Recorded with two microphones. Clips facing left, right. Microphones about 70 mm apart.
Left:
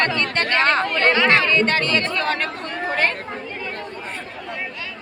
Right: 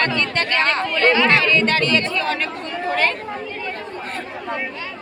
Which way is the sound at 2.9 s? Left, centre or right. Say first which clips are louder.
Right 2 dB; left.